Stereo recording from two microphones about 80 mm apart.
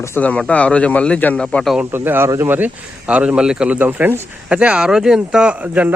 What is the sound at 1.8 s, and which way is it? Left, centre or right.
Speech, right.